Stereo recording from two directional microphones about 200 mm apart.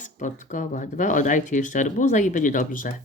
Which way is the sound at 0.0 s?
40° left (ahead or behind).